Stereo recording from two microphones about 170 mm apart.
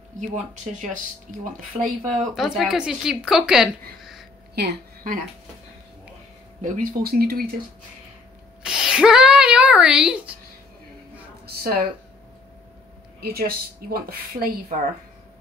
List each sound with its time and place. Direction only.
2.0 s speech: centre (ahead or behind)
4.0 s a sound: centre (ahead or behind)
4.6 s a woman's voice: 60° right (ahead or behind)
6.6 s speech: 50° right (ahead or behind)
8.6 s a child's voice: 5° right (ahead or behind)
11.4 s a woman's voice: 65° right (ahead or behind)
13.2 s speech: 65° right (ahead or behind)